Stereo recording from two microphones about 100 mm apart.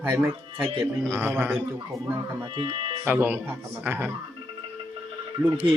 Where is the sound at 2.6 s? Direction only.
60° right (ahead or behind).